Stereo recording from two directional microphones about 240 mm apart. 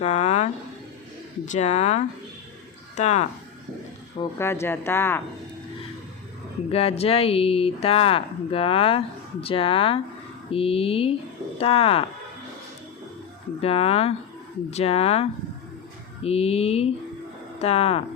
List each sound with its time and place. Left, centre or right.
0.0 s a sound: left
1.5 s speech: left
4.2 s speech: centre
6.7 s speech: left
13.6 s speech: left